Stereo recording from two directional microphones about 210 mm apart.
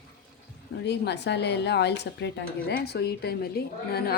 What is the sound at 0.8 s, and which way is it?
A woman's voice, 55° left (ahead or behind).